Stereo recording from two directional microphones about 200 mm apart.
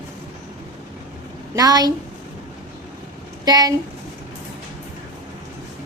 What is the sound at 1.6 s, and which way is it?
Speech, 20° right (ahead or behind).